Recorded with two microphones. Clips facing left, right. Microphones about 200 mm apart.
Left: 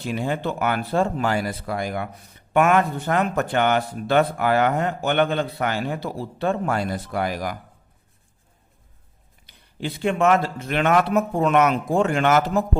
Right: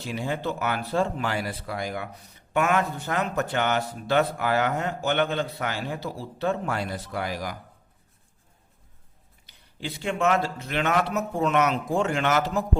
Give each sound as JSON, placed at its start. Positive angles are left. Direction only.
{"t": 0.0, "sound": "speech", "side_deg": 60}
{"t": 9.5, "sound": "speech", "side_deg": 55}